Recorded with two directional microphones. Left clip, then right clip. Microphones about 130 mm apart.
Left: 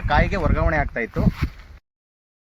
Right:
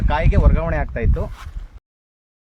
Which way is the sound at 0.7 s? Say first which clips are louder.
Left 2 dB; 50° right (ahead or behind).